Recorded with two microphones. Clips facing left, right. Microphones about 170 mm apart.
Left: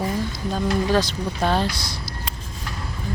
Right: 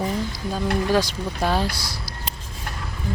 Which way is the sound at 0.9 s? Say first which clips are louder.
Even; 10° right (ahead or behind).